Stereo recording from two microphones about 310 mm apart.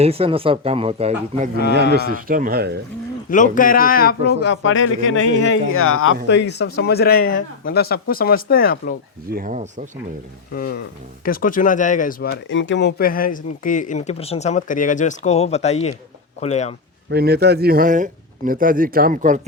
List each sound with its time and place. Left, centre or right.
0.0 s a man's voice: centre
3.2 s speech: left
9.3 s a man's voice: right
10.5 s speech: left
17.1 s a man's voice: right